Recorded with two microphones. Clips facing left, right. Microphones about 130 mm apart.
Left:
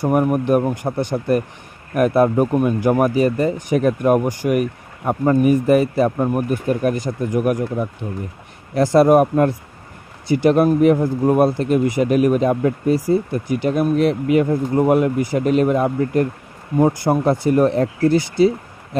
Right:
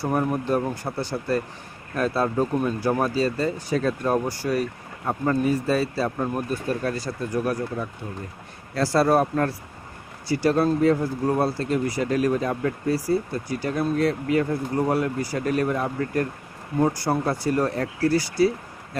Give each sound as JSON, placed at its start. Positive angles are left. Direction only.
{"t": 0.0, "sound": "speech", "side_deg": 15}